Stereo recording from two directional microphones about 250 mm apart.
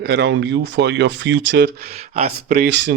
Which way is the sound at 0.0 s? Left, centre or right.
Right.